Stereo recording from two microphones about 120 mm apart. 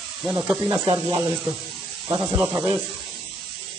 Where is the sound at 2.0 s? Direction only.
20° right (ahead or behind).